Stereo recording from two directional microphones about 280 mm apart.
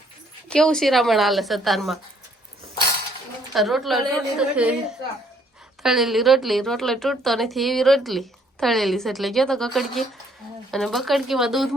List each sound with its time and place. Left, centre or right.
0.5 s speech: centre
3.5 s speech: centre
5.8 s speech: centre